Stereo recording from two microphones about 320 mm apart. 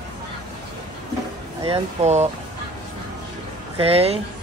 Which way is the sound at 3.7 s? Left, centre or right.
Centre.